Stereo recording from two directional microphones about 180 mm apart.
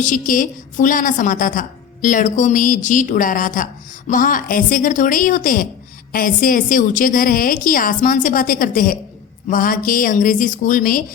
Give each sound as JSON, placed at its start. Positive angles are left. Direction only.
{"t": 0.0, "sound": "a woman's voice", "side_deg": 45}